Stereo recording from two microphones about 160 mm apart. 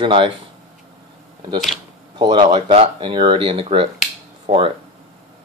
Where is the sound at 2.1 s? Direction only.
30° right (ahead or behind).